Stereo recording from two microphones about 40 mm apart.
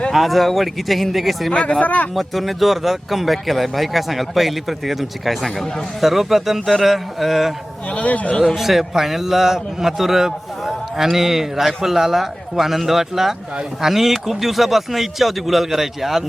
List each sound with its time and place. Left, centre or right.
0.1 s speech: centre
1.5 s speech: left
1.8 s speech: left
2.1 s a man's voice: centre
7.9 s speech: left
8.5 s a man's voice: centre